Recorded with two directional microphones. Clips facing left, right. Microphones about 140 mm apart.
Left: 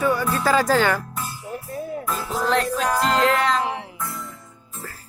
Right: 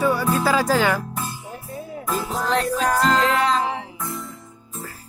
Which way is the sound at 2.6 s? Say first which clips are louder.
Right 2 dB; 35° right (ahead or behind).